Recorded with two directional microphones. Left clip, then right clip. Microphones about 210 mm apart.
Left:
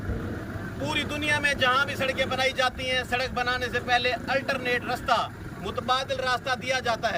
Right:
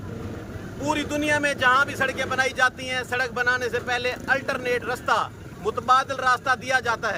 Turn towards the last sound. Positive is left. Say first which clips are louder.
# right 3 dB
turn(degrees=-20)  # may be behind; listen again after turning